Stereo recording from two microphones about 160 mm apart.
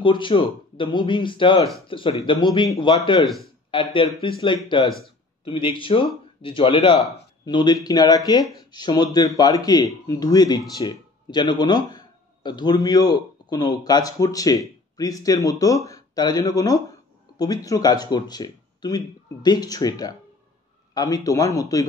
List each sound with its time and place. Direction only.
0.0 s a man's voice: 30° left (ahead or behind)